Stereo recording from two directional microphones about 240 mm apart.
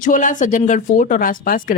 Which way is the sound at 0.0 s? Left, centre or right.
Left.